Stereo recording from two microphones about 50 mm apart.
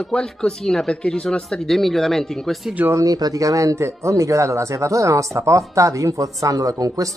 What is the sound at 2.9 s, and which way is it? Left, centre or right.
Speech, right.